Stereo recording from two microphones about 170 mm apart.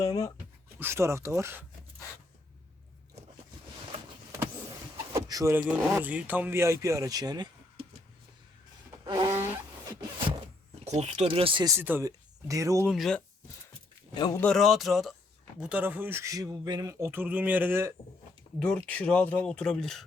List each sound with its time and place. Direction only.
0.0 s speech: 20° left (ahead or behind)
0.8 s speech: 15° right (ahead or behind)
3.2 s biting: 40° right (ahead or behind)
5.1 s a sound: 20° right (ahead or behind)
5.5 s speech: 10° right (ahead or behind); by 7.9 s 25° right (ahead or behind)
9.0 s a sound: 25° right (ahead or behind)
10.8 s speech: 40° right (ahead or behind); by 12.9 s 20° right (ahead or behind)
12.9 s speech: centre (ahead or behind)
14.1 s speech: 25° left (ahead or behind)
14.3 s speech: 5° left (ahead or behind); by 17.9 s 15° right (ahead or behind)
18.6 s speech: 5° left (ahead or behind)